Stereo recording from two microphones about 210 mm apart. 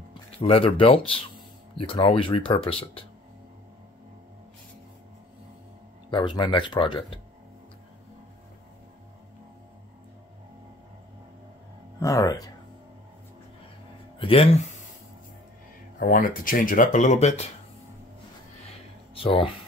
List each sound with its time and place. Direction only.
0.4 s speech: 25° left (ahead or behind)
6.0 s speech: 20° left (ahead or behind)
12.0 s speech: 15° left (ahead or behind)
14.1 s speech: 25° left (ahead or behind)
16.0 s speech: 40° left (ahead or behind)
19.1 s speech: 25° left (ahead or behind)